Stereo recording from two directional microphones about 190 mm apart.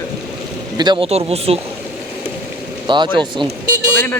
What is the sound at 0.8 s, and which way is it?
Speech, 25° right (ahead or behind).